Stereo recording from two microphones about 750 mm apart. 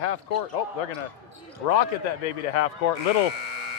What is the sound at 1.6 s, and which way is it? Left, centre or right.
Speech, left.